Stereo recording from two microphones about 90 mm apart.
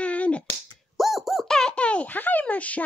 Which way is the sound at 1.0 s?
Centre (ahead or behind).